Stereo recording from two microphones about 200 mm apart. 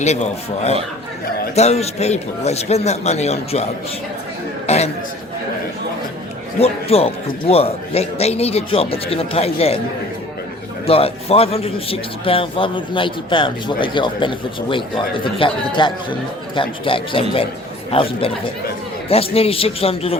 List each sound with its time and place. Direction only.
1.5 s a man's voice: 35° left (ahead or behind)
6.6 s a man's voice: 30° left (ahead or behind)
10.8 s a man's voice: 30° left (ahead or behind)